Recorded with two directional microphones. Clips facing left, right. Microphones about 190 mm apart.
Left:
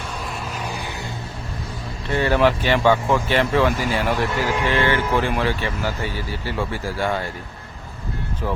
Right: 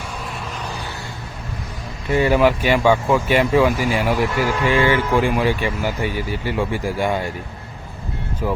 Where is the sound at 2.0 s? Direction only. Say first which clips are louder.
Right 3 dB; 10° right (ahead or behind).